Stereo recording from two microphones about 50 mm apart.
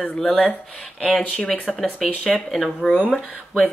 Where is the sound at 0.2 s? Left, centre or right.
Centre.